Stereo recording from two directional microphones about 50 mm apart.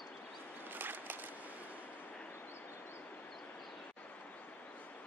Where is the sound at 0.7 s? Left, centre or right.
Right.